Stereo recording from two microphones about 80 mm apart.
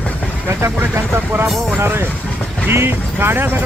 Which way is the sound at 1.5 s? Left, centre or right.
Centre.